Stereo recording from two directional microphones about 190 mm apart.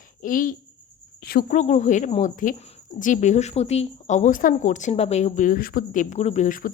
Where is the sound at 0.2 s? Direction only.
45° left (ahead or behind).